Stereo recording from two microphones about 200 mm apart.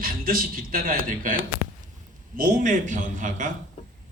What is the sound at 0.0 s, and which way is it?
A man's voice, 45° right (ahead or behind).